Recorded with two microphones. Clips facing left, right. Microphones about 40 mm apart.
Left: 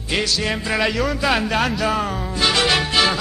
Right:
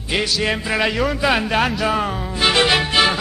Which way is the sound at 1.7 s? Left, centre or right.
Centre.